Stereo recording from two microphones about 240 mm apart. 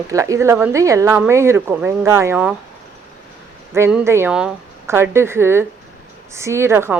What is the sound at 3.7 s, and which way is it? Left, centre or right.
A woman's voice, centre.